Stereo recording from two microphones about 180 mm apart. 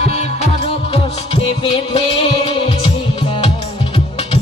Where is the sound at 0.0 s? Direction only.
35° left (ahead or behind).